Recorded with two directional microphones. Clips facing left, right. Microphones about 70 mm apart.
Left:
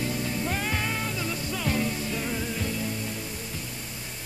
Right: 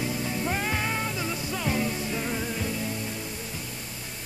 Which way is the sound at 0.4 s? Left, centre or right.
Centre.